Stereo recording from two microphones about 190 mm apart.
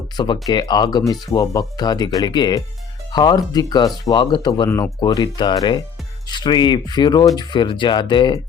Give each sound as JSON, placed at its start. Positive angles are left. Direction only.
{"t": 0.2, "sound": "speech", "side_deg": 25}